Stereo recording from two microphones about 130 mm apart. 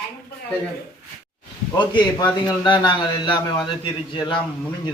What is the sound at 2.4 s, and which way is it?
A man's voice, 35° left (ahead or behind).